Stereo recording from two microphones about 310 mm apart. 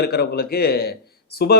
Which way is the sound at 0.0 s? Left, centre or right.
Left.